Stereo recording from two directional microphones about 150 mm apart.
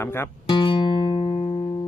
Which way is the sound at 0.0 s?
15° left (ahead or behind).